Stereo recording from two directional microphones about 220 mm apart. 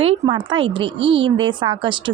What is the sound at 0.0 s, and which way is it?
A woman's voice, 25° right (ahead or behind).